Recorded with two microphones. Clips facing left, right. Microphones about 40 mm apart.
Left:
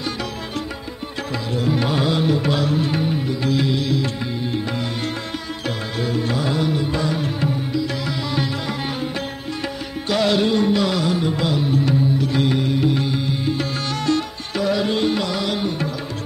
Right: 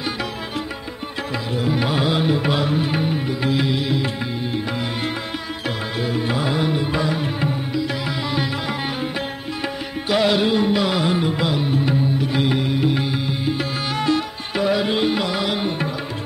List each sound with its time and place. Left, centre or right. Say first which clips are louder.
1.6 s music: even; centre
5.9 s music: even; centre
10.0 s music: even; centre